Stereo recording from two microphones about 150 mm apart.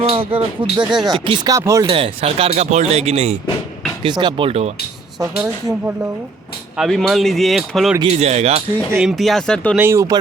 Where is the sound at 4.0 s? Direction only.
30° right (ahead or behind).